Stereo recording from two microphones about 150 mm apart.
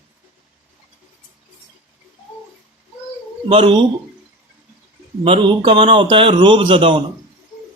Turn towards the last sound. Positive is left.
turn(degrees=-35)  # may be behind; listen again after turning